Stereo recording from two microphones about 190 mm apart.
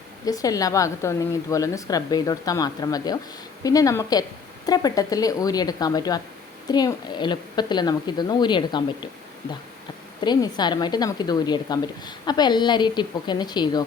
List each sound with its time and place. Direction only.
0.3 s a woman's voice: 20° left (ahead or behind)
10.2 s a woman's voice: 25° left (ahead or behind)